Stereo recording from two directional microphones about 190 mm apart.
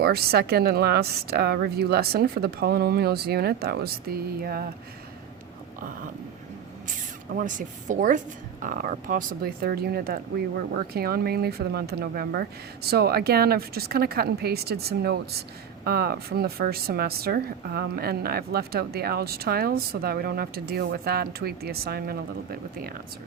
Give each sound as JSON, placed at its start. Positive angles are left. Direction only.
{"t": 0.0, "sound": "a woman's voice", "side_deg": -55}
{"t": 7.3, "sound": "speech", "side_deg": -40}